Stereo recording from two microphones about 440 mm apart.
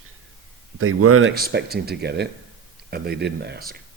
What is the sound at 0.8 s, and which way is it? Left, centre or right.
Speech, right.